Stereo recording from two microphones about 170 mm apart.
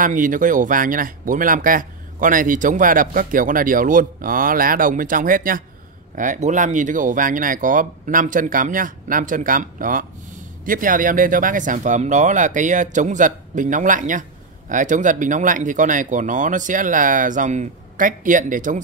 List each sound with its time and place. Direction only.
0.0 s speech: 50° right (ahead or behind)